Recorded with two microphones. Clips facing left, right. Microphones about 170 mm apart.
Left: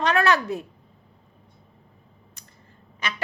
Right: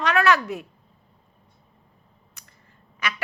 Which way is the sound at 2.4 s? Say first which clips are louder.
Left 3 dB; 30° left (ahead or behind).